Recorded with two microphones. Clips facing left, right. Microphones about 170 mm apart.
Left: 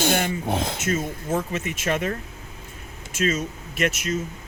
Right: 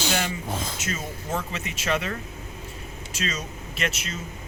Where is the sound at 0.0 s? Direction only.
55° left (ahead or behind).